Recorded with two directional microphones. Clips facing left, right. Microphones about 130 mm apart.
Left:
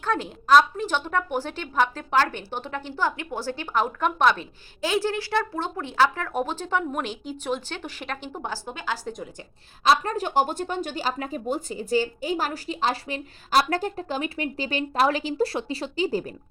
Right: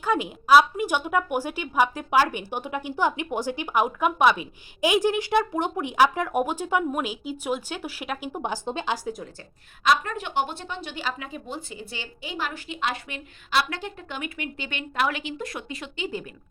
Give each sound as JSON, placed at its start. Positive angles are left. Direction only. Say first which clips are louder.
{"t": 0.0, "sound": "a woman's voice", "louder": "right 2 dB", "side_deg": -10}
{"t": 9.8, "sound": "a woman's voice", "louder": "left 2 dB", "side_deg": 35}